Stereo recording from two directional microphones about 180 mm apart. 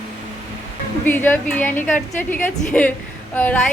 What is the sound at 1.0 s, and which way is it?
A woman's voice, 10° left (ahead or behind).